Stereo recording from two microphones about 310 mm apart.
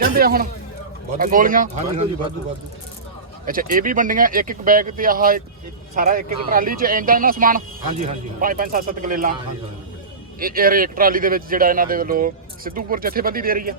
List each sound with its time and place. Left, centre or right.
0.0 s speech: right
3.4 s speech: right
10.4 s speech: right